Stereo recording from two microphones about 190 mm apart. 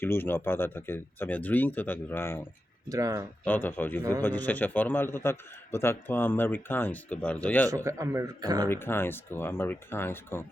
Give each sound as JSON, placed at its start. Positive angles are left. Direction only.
{"t": 0.0, "sound": "a man's voice", "side_deg": 10}
{"t": 2.9, "sound": "a man's voice", "side_deg": -15}
{"t": 3.4, "sound": "a man's voice", "side_deg": 10}
{"t": 7.9, "sound": "a man's voice", "side_deg": -15}
{"t": 8.7, "sound": "a man's voice", "side_deg": 10}